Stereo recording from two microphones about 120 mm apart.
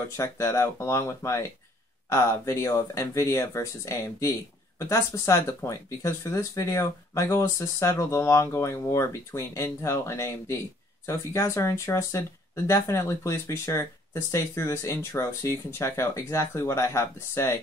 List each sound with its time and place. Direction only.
0.2 s speech: 25° left (ahead or behind)